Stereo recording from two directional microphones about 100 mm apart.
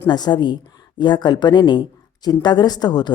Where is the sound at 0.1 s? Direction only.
45° left (ahead or behind).